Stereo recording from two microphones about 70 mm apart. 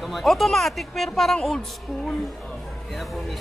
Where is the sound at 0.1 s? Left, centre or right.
Centre.